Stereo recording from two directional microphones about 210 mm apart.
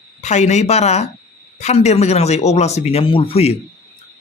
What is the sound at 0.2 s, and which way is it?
A man's voice, 35° left (ahead or behind).